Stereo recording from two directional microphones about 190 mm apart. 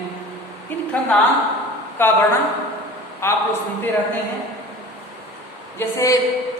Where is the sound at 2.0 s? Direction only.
10° left (ahead or behind).